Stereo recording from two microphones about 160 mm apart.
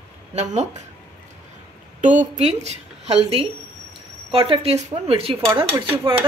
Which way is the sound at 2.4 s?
40° right (ahead or behind).